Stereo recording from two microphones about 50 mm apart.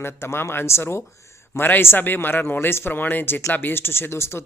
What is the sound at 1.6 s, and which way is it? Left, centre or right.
Speech, left.